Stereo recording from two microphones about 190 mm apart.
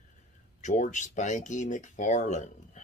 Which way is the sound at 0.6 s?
40° left (ahead or behind).